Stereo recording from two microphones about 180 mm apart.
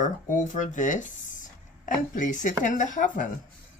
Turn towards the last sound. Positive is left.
turn(degrees=45)  # may be behind; listen again after turning